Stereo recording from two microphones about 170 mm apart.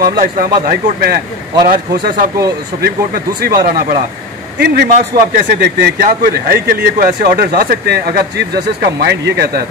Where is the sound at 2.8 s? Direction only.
65° right (ahead or behind).